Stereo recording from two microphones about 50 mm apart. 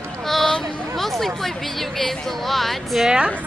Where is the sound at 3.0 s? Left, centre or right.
Centre.